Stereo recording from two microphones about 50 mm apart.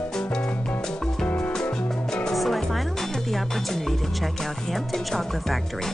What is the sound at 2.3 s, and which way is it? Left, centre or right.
Music, centre.